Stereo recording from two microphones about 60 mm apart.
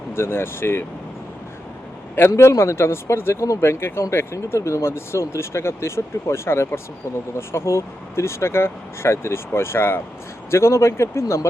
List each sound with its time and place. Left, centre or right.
0.1 s speech: left
2.3 s speech: left
10.5 s speech: left